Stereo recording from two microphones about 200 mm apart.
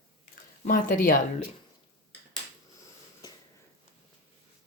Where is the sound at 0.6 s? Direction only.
45° left (ahead or behind).